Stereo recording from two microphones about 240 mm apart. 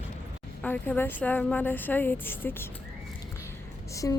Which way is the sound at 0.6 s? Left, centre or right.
Centre.